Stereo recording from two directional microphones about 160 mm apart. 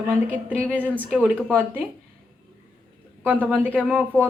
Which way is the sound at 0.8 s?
10° left (ahead or behind).